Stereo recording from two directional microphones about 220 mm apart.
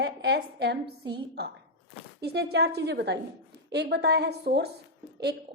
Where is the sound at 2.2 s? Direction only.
50° right (ahead or behind).